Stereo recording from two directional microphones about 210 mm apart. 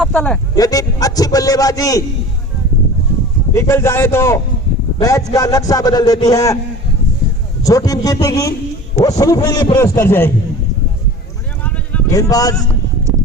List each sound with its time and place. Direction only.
0.0 s a man's voice: 5° left (ahead or behind)
0.5 s a man's voice: 15° left (ahead or behind)
3.5 s a man's voice: 10° left (ahead or behind)
7.6 s a man's voice: 15° left (ahead or behind)
11.6 s clip-clop: 5° left (ahead or behind)
12.3 s a man's voice: 15° left (ahead or behind)